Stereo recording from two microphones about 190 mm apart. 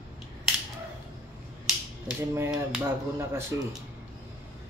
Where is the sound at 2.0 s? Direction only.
10° right (ahead or behind).